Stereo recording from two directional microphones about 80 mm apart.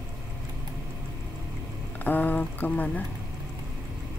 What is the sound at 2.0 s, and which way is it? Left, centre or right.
Speech, left.